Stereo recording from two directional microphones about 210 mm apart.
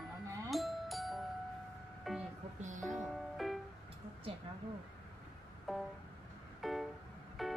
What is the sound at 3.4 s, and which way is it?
Music, centre (ahead or behind).